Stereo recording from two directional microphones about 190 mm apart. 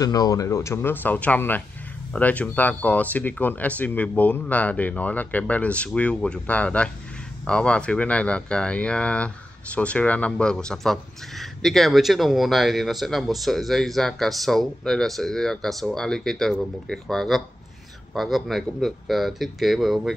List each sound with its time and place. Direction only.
0.0 s speech: 20° left (ahead or behind); by 20.2 s centre (ahead or behind)